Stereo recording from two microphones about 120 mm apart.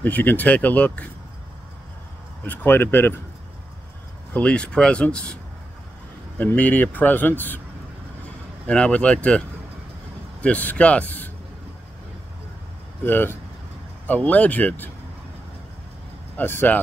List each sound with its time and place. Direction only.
0.0 s a man's voice: 15° left (ahead or behind)
2.4 s a man's voice: 15° left (ahead or behind)
4.3 s a man's voice: 10° left (ahead or behind)
8.6 s a man's voice: 10° left (ahead or behind)
10.4 s a man's voice: 15° left (ahead or behind)
13.0 s a man's voice: 20° left (ahead or behind)
16.3 s a man's voice: 15° left (ahead or behind)